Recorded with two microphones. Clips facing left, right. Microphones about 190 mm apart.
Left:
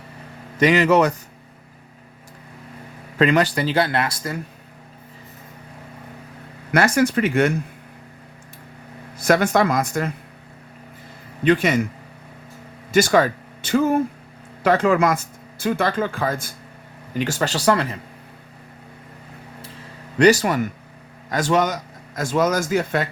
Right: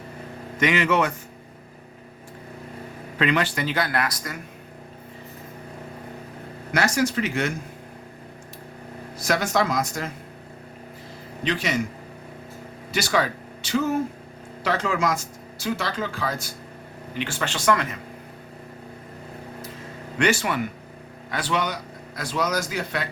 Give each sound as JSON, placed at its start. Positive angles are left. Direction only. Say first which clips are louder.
{"t": 0.6, "sound": "speech", "louder": "left 6 dB", "side_deg": 40}
{"t": 3.2, "sound": "speech", "louder": "left 5 dB", "side_deg": 40}
{"t": 6.7, "sound": "speech", "louder": "left 5 dB", "side_deg": 55}
{"t": 9.1, "sound": "speech", "louder": "left 6 dB", "side_deg": 55}
{"t": 11.4, "sound": "speech", "louder": "left 8 dB", "side_deg": 55}
{"t": 12.9, "sound": "speech", "louder": "left 8 dB", "side_deg": 50}
{"t": 17.2, "sound": "speech", "louder": "left 6 dB", "side_deg": 40}
{"t": 20.1, "sound": "a man's voice", "louder": "left 7 dB", "side_deg": 40}